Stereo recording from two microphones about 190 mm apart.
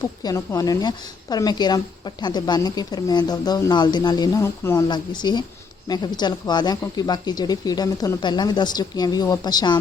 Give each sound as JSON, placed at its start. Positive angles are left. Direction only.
{"t": 0.2, "sound": "speech", "side_deg": 20}